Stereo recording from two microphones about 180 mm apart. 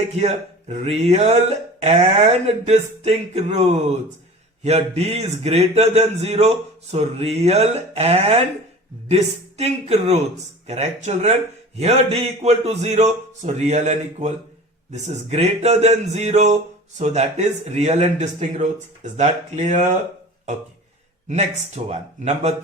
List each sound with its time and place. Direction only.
0.2 s a man's voice: 40° right (ahead or behind)
21.8 s a man's voice: 40° right (ahead or behind)